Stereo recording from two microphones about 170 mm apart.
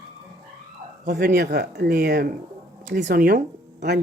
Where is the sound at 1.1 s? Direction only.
60° right (ahead or behind).